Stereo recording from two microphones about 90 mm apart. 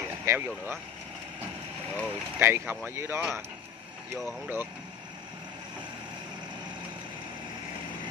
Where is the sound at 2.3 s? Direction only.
25° right (ahead or behind).